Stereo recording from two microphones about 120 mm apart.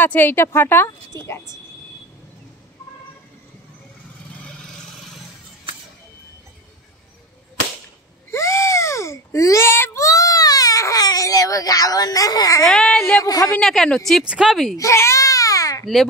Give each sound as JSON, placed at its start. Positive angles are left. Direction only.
{"t": 0.0, "sound": "a woman's voice", "side_deg": 15}
{"t": 8.3, "sound": "a child's voice", "side_deg": 20}
{"t": 12.6, "sound": "speech", "side_deg": 5}
{"t": 13.1, "sound": "a woman's voice", "side_deg": 30}
{"t": 13.6, "sound": "speech", "side_deg": 5}
{"t": 14.8, "sound": "baby cry", "side_deg": 25}
{"t": 15.8, "sound": "a child's voice", "side_deg": 0}